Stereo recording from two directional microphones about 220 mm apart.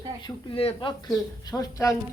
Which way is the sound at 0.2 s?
25° left (ahead or behind).